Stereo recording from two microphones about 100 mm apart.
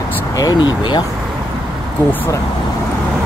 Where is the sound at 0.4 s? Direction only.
45° left (ahead or behind).